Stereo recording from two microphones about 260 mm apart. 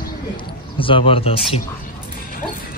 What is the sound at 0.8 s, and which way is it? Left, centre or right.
Speech, left.